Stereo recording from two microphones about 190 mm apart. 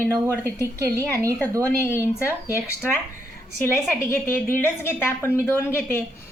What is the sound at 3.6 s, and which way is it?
A woman's voice, 15° left (ahead or behind).